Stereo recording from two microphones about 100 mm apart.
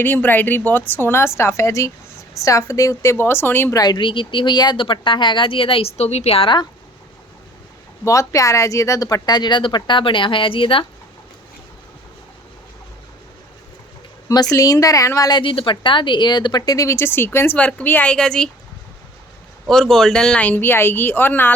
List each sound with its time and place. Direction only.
0.0 s speech: 20° left (ahead or behind)
3.8 s speech: 45° left (ahead or behind); by 6.6 s 70° left (ahead or behind)
8.0 s speech: 30° left (ahead or behind); by 10.8 s 60° left (ahead or behind)
14.5 s a woman's voice: 35° left (ahead or behind)
15.4 s speech: 60° left (ahead or behind); by 18.5 s 5° left (ahead or behind)
19.6 s speech: 5° left (ahead or behind); by 21.5 s 20° left (ahead or behind)